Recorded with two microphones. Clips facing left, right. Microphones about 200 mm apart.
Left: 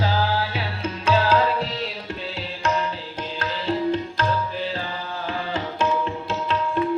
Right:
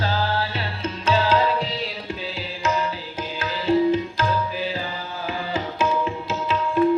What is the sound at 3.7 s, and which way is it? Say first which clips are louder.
Music: right 6 dB; 15° right (ahead or behind).